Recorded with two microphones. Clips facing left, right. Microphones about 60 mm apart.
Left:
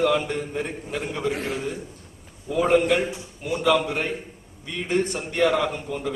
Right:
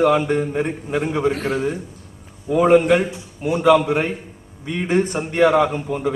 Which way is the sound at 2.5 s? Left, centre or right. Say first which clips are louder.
Right 6 dB; centre.